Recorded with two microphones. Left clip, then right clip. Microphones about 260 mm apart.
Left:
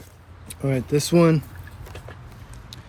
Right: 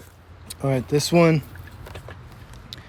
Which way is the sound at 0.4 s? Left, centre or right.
Centre.